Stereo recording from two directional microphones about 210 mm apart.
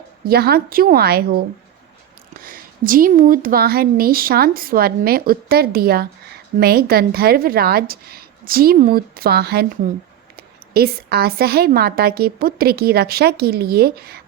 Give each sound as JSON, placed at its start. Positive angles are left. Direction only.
{"t": 0.3, "sound": "a woman's voice", "side_deg": -50}
{"t": 2.4, "sound": "a woman's voice", "side_deg": -45}